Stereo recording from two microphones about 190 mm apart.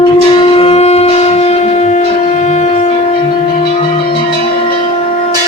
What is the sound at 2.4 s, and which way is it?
Wind instrument, 35° left (ahead or behind).